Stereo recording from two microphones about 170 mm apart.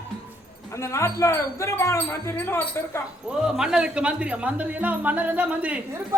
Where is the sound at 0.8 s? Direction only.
15° left (ahead or behind).